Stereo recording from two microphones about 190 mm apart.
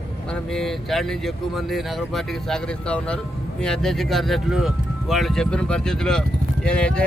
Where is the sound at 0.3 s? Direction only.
5° left (ahead or behind).